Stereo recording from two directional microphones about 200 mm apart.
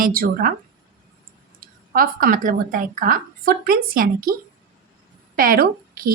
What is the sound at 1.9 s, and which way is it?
A woman's voice, 45° right (ahead or behind).